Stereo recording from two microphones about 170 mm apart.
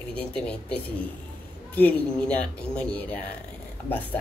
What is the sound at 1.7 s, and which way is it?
Speech, 10° left (ahead or behind).